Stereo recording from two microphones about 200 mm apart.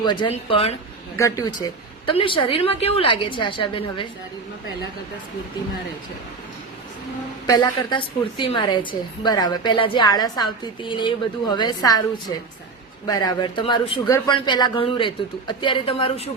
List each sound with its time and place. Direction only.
0.0 s a woman's voice: 20° left (ahead or behind)
1.1 s a woman's voice: 15° left (ahead or behind)
7.4 s a woman's voice: 20° left (ahead or behind)
13.1 s a woman's voice: 20° left (ahead or behind)